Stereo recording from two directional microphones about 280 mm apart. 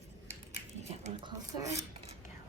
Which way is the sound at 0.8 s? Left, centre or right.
Right.